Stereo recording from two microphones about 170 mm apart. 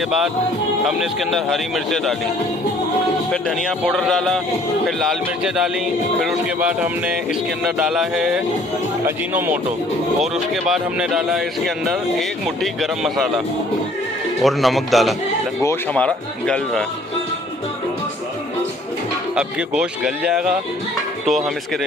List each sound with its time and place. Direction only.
0.9 s a man's voice: centre (ahead or behind)
3.8 s a man's voice: centre (ahead or behind)
6.1 s a man's voice: 5° right (ahead or behind)
10.7 s a man's voice: centre (ahead or behind)
14.4 s a man's voice: centre (ahead or behind)
19.4 s a man's voice: 5° right (ahead or behind)